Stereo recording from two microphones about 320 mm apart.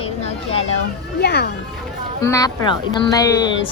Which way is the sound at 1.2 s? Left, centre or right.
Left.